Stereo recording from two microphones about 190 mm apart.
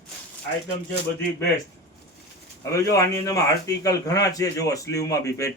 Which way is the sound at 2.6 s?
15° left (ahead or behind).